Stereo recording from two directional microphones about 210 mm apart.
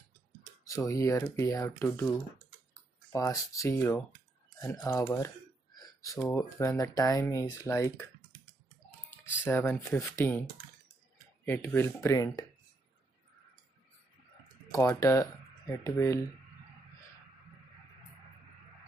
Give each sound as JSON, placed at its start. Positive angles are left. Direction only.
{"t": 0.7, "sound": "speech", "side_deg": 15}
{"t": 5.1, "sound": "a sound", "side_deg": 15}
{"t": 6.3, "sound": "speech", "side_deg": 15}
{"t": 9.4, "sound": "speech", "side_deg": 10}
{"t": 11.4, "sound": "speech", "side_deg": 10}
{"t": 14.7, "sound": "speech", "side_deg": 15}